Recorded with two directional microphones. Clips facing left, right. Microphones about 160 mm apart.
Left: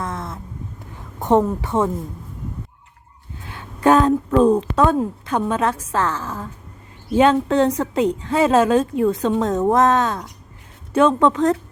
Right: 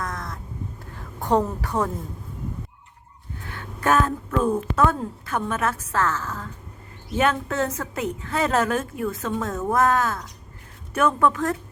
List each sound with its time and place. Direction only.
0.0 s cat: 25° left (ahead or behind)
0.9 s a woman's voice: 20° left (ahead or behind)
3.4 s a sound: 15° left (ahead or behind)
4.3 s a woman's voice: 35° left (ahead or behind)
4.6 s a woman's voice: 20° left (ahead or behind)
9.5 s a woman's voice: 35° left (ahead or behind)
9.7 s speech: 20° left (ahead or behind)